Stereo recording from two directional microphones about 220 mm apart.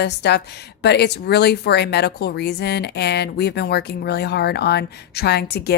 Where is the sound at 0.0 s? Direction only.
50° left (ahead or behind).